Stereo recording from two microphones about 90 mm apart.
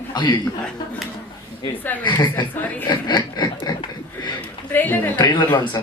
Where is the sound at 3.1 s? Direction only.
55° left (ahead or behind).